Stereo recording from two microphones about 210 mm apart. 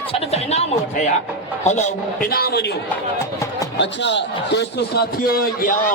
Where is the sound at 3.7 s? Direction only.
55° left (ahead or behind).